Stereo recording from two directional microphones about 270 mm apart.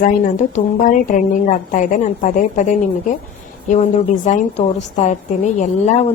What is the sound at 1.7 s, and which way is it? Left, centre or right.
A woman's voice, left.